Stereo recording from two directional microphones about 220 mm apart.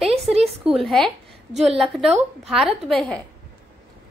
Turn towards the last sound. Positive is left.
turn(degrees=0)  # may be behind; listen again after turning